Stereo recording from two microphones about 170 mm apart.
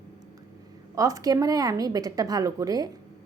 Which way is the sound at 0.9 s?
20° right (ahead or behind).